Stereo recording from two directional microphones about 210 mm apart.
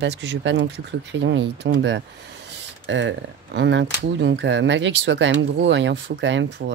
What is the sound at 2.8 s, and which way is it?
Speech, 60° right (ahead or behind).